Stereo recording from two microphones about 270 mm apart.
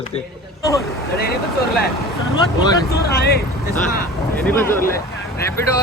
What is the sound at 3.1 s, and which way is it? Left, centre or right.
Speech, left.